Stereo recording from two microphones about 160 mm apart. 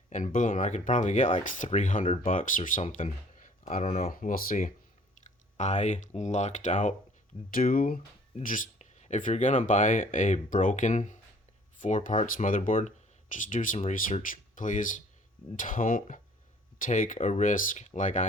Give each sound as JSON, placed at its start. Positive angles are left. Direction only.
{"t": 0.3, "sound": "speech", "side_deg": 55}
{"t": 3.8, "sound": "speech", "side_deg": 40}
{"t": 4.1, "sound": "speech", "side_deg": 60}
{"t": 7.5, "sound": "speech", "side_deg": 60}